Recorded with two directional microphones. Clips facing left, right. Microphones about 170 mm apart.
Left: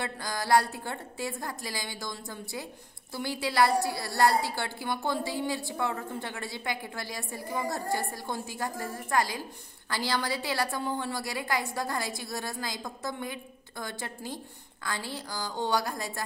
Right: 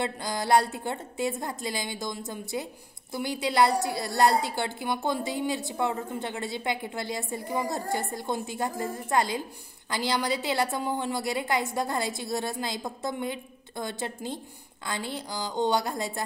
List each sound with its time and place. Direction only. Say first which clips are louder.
0.0 s a woman's voice: right 4 dB; 20° right (ahead or behind)